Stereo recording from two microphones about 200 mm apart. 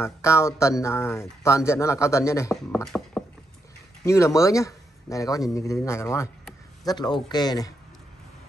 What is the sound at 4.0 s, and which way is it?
A man's voice, 15° left (ahead or behind).